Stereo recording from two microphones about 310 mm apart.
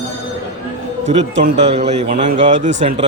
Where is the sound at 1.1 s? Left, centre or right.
Centre.